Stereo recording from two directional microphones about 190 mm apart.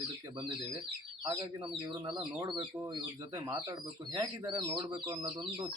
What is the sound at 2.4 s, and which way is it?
Speech, 25° right (ahead or behind).